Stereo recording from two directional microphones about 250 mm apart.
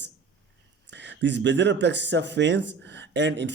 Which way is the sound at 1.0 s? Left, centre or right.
Right.